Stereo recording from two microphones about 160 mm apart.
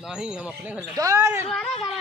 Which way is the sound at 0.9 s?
20° right (ahead or behind).